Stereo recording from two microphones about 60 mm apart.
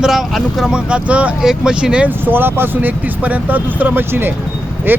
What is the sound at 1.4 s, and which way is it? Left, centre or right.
Speech, centre.